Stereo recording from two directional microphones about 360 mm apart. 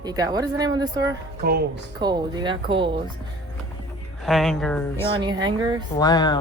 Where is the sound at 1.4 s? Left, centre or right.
Right.